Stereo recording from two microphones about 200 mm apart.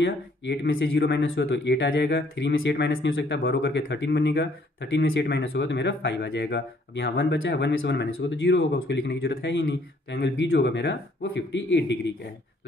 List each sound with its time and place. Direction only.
0.0 s speech: 60° left (ahead or behind)